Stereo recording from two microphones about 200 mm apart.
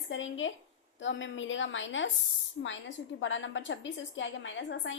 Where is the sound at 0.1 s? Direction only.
70° left (ahead or behind).